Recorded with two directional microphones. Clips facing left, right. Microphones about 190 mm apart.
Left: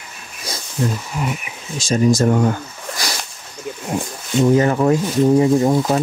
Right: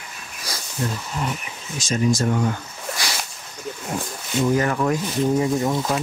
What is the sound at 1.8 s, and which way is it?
Speech, 35° left (ahead or behind).